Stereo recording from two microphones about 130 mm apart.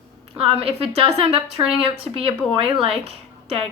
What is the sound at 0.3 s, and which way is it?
Speech, 50° right (ahead or behind).